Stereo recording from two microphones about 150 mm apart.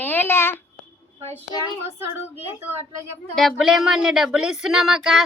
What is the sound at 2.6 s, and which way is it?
Speech, 15° right (ahead or behind).